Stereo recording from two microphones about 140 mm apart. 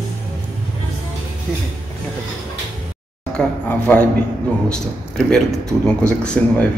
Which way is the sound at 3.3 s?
10° left (ahead or behind).